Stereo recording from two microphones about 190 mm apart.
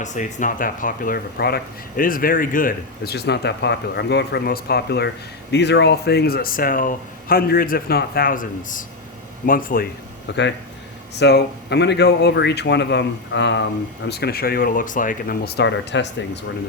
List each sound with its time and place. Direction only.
0.0 s speech: 40° left (ahead or behind)
10.3 s speech: 65° left (ahead or behind)
14.1 s speech: 55° left (ahead or behind)